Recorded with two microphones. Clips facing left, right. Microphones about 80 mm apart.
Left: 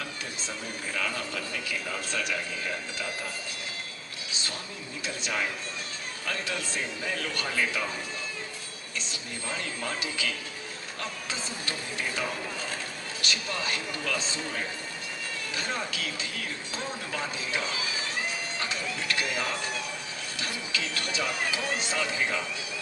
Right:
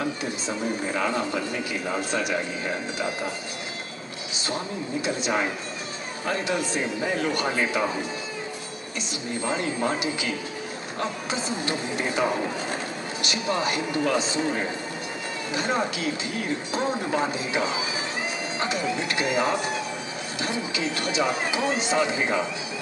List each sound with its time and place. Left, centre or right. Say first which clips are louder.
0.0 s speech: right 9 dB; right
5.0 s speech: right 5 dB; right
9.0 s speech: right 12 dB; right